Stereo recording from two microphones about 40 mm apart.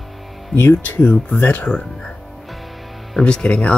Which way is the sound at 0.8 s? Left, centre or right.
Left.